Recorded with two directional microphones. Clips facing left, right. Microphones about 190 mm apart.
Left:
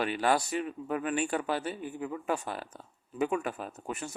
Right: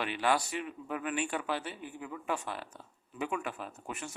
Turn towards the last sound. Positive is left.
turn(degrees=40)  # may be behind; listen again after turning